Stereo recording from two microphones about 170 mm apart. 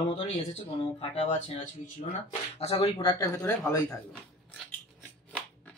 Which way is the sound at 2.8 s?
25° left (ahead or behind).